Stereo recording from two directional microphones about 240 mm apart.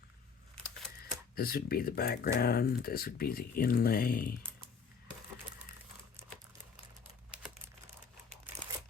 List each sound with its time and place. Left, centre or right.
1.4 s speech: left